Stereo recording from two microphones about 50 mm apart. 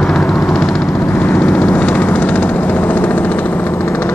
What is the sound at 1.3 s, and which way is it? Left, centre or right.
Vehicle, left.